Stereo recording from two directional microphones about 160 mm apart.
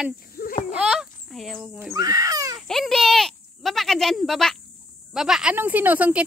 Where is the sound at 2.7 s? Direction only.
Centre (ahead or behind).